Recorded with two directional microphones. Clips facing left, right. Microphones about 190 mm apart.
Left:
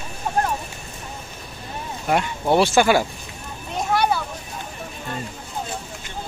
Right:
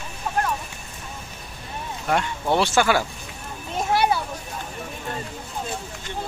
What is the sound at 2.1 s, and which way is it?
Speech, 15° left (ahead or behind).